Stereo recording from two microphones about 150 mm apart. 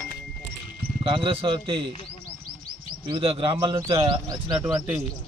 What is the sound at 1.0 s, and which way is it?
Speech, 35° right (ahead or behind).